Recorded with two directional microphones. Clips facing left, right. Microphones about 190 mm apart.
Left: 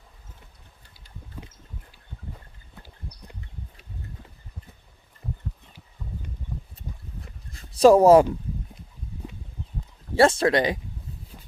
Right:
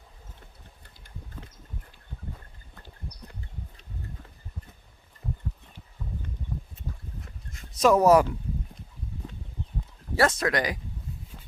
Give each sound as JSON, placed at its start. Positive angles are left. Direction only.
{"t": 7.5, "sound": "speech", "side_deg": 35}
{"t": 10.2, "sound": "speech", "side_deg": 30}